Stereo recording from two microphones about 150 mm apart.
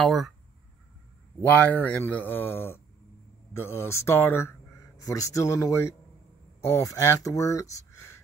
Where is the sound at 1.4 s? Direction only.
10° left (ahead or behind).